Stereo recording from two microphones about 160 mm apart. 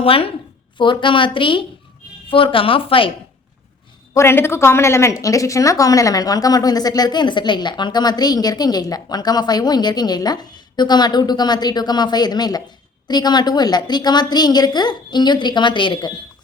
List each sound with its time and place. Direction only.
0.0 s a woman's voice: 35° left (ahead or behind)
4.1 s a woman's voice: 15° left (ahead or behind)